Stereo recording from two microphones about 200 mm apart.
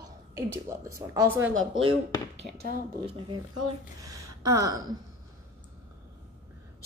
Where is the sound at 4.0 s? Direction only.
15° right (ahead or behind).